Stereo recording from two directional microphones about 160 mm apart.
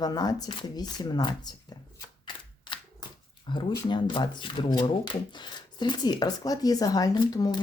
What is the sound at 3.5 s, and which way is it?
Speech, 30° left (ahead or behind).